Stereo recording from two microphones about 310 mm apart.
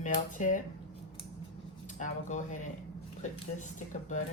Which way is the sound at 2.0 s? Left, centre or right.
Left.